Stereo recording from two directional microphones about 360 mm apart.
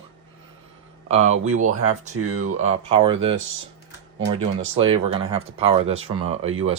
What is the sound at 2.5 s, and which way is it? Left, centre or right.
Speech, centre.